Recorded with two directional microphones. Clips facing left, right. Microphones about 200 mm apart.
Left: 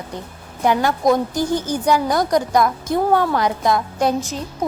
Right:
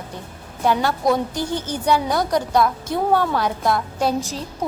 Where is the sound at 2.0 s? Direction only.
5° right (ahead or behind).